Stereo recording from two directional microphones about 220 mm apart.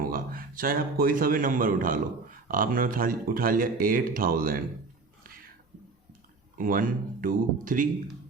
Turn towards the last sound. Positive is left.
turn(degrees=-40)  # may be behind; listen again after turning